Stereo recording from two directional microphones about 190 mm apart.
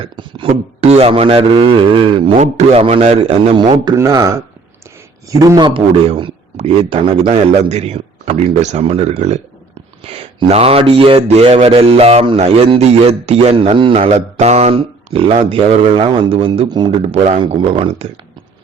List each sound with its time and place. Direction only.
0.0 s speech: 25° right (ahead or behind)
5.3 s speech: 20° right (ahead or behind)